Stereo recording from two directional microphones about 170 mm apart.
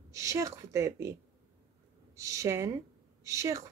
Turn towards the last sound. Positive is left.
turn(degrees=-20)  # may be behind; listen again after turning